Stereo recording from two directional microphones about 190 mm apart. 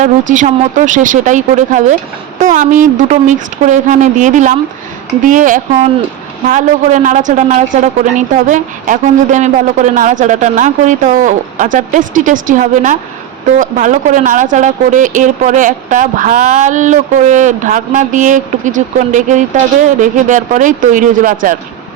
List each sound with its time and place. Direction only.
0.0 s speech: 40° right (ahead or behind)